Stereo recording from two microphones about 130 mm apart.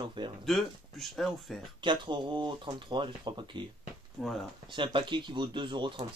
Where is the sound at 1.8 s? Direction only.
35° right (ahead or behind).